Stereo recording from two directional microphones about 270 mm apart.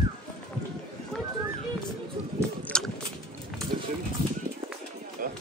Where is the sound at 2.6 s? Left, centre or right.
Centre.